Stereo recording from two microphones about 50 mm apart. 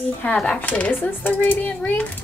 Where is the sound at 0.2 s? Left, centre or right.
Left.